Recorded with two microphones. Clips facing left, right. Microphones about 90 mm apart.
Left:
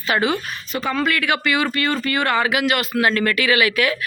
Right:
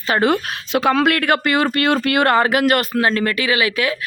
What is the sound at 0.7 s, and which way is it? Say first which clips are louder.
Speech: right 6 dB; 75° right (ahead or behind).